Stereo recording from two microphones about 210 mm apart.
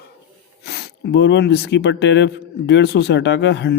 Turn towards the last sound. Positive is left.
turn(degrees=55)  # may be behind; listen again after turning